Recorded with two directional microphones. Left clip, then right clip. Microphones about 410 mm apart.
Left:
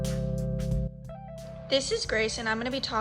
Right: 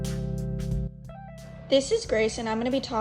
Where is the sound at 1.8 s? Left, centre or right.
Left.